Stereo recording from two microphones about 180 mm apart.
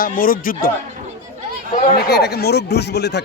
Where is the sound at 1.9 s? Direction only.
60° left (ahead or behind).